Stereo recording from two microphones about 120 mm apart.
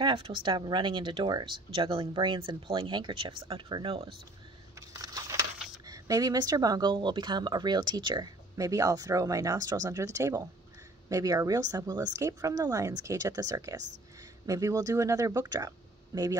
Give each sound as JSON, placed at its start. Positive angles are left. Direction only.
{"t": 0.0, "sound": "speech", "side_deg": -45}
{"t": 4.7, "sound": "a sound", "side_deg": -30}
{"t": 5.9, "sound": "speech", "side_deg": -30}